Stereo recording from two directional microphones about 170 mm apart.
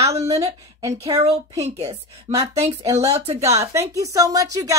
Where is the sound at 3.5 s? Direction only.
20° right (ahead or behind).